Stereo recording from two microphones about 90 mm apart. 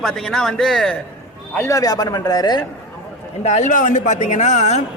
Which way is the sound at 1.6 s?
35° left (ahead or behind).